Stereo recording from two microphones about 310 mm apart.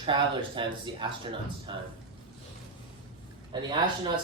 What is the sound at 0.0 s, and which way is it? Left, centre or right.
Speech, centre.